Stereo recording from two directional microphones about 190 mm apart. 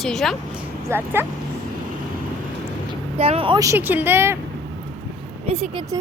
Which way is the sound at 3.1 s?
30° right (ahead or behind).